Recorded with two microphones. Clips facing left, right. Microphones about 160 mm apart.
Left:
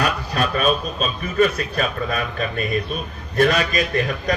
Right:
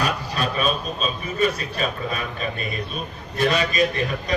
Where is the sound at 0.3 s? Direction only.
50° left (ahead or behind).